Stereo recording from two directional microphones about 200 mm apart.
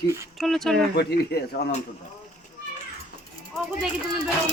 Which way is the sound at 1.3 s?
50° left (ahead or behind).